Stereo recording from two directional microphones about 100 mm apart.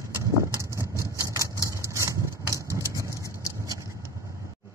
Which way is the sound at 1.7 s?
30° right (ahead or behind).